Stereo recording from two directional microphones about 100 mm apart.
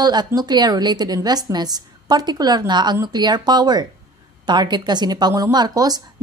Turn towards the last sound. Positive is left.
turn(degrees=-40)  # may be behind; listen again after turning